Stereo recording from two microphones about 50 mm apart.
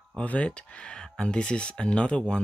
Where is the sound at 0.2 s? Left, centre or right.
Left.